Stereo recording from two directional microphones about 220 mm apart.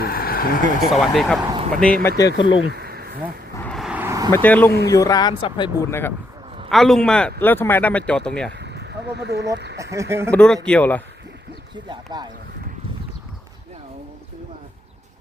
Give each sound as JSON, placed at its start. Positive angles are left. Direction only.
{"t": 0.0, "sound": "vehicle", "side_deg": 40}
{"t": 0.9, "sound": "speech", "side_deg": 0}
{"t": 2.1, "sound": "speech", "side_deg": 20}
{"t": 2.6, "sound": "a sound", "side_deg": -45}
{"t": 3.6, "sound": "vehicle", "side_deg": 0}
{"t": 4.4, "sound": "speech", "side_deg": 5}
{"t": 8.6, "sound": "a sound", "side_deg": -50}
{"t": 9.7, "sound": "speech", "side_deg": -15}
{"t": 10.3, "sound": "speech", "side_deg": 5}
{"t": 11.9, "sound": "speech", "side_deg": -20}